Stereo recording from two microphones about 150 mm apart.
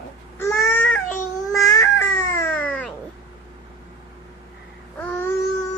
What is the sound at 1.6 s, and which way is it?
Baby cry, 25° left (ahead or behind).